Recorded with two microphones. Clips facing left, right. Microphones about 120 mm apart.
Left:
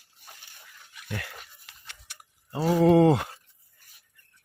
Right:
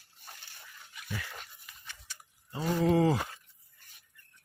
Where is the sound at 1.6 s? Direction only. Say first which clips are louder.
Even; 70° left (ahead or behind).